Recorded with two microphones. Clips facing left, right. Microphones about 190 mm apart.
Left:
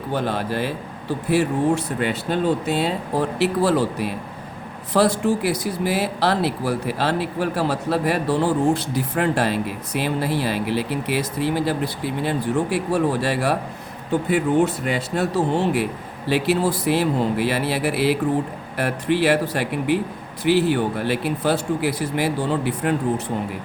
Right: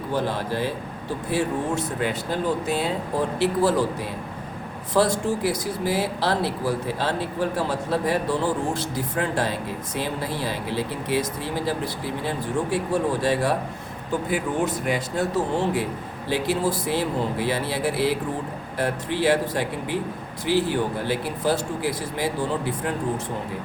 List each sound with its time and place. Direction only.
0.1 s a man's voice: 65° left (ahead or behind)
16.3 s speech: 70° left (ahead or behind)